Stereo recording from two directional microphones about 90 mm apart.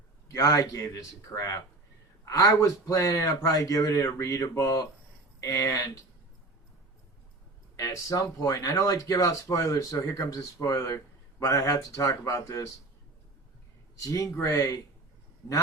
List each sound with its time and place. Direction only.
0.3 s a man's voice: 40° left (ahead or behind)
7.8 s a man's voice: 40° left (ahead or behind)
14.0 s a man's voice: 40° left (ahead or behind)